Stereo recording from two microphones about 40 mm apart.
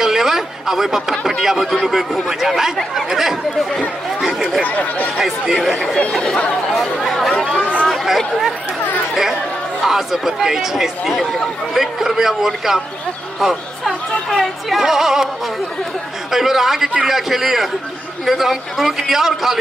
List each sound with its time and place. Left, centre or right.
0.0 s a man's voice: centre
4.6 s speech: left
5.1 s speech: centre
5.8 s speech: left
6.7 s a man's voice: centre
9.8 s speech: centre
16.3 s a man's voice: centre